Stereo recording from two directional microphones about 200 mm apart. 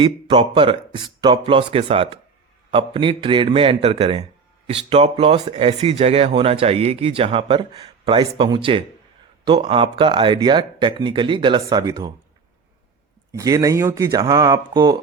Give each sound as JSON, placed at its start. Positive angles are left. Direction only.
{"t": 0.0, "sound": "speech", "side_deg": -25}
{"t": 13.3, "sound": "speech", "side_deg": -15}